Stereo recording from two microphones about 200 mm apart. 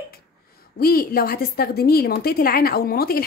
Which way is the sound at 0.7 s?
50° left (ahead or behind).